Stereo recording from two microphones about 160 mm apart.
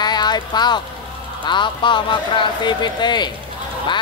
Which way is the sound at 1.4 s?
30° left (ahead or behind).